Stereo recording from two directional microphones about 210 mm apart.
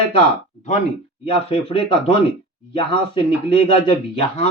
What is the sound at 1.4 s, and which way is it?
Speech, 25° left (ahead or behind).